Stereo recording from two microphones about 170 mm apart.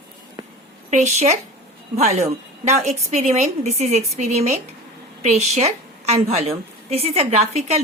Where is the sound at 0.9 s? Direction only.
45° right (ahead or behind).